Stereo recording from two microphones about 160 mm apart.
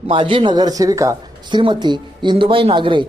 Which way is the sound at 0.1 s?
30° right (ahead or behind).